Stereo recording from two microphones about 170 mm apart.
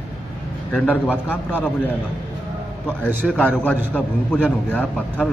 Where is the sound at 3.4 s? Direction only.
10° left (ahead or behind).